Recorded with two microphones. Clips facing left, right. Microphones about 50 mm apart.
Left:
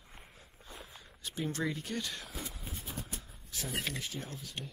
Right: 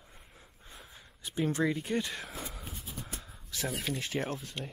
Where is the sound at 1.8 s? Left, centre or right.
Right.